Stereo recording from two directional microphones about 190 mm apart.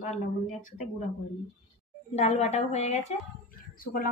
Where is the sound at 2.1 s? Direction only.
35° left (ahead or behind).